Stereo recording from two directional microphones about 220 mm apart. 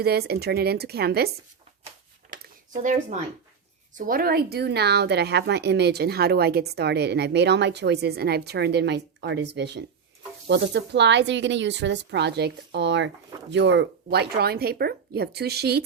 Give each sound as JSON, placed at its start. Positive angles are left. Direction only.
{"t": 0.0, "sound": "speech", "side_deg": -45}
{"t": 3.9, "sound": "speech", "side_deg": -40}